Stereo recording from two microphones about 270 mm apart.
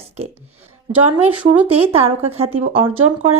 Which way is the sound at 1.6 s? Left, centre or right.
Right.